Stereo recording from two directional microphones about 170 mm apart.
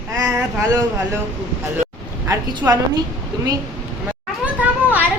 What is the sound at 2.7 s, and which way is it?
Speech, 15° right (ahead or behind).